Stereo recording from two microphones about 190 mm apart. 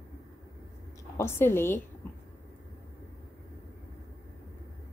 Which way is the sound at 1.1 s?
15° left (ahead or behind).